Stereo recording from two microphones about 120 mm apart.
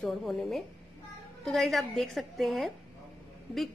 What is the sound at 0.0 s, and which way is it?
A woman's voice, centre (ahead or behind).